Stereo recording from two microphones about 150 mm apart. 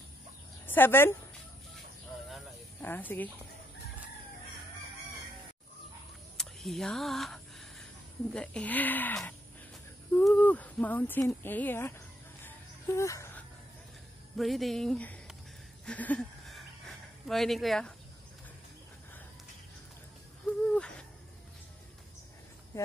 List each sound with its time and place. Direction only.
0.7 s a woman's voice: 15° left (ahead or behind)
2.8 s speech: 15° left (ahead or behind)
6.3 s speech: centre (ahead or behind)
12.4 s music: 20° left (ahead or behind)
14.3 s speech: centre (ahead or behind)
15.8 s a sound: 10° left (ahead or behind)
20.6 s owl: 5° left (ahead or behind)
22.7 s speech: 20° left (ahead or behind)